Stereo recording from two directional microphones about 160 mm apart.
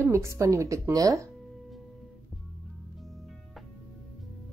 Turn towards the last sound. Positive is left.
turn(degrees=0)  # may be behind; listen again after turning